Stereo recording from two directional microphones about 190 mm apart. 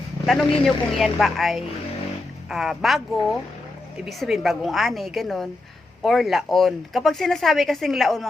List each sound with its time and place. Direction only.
0.3 s speech: centre (ahead or behind)